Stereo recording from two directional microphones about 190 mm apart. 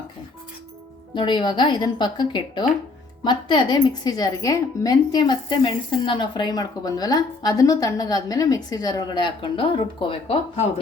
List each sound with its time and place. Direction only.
1.1 s a woman's voice: 25° left (ahead or behind)